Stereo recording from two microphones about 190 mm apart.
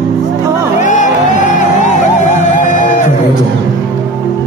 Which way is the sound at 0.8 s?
40° left (ahead or behind).